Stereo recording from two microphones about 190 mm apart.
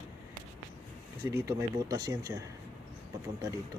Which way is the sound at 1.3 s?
15° right (ahead or behind).